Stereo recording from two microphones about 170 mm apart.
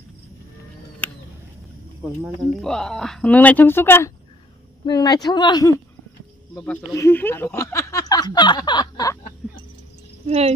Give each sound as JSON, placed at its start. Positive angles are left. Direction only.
{"t": 2.2, "sound": "speech", "side_deg": 5}
{"t": 4.8, "sound": "speech", "side_deg": 25}
{"t": 6.5, "sound": "speech", "side_deg": 5}
{"t": 9.4, "sound": "a sound", "side_deg": 0}
{"t": 10.2, "sound": "speech", "side_deg": -35}